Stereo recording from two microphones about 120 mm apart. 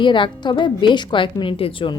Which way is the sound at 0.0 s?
40° left (ahead or behind).